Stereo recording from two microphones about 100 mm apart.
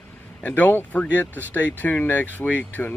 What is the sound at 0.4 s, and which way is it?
Speech, 15° left (ahead or behind).